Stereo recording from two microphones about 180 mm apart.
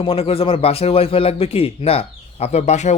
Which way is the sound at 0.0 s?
30° left (ahead or behind).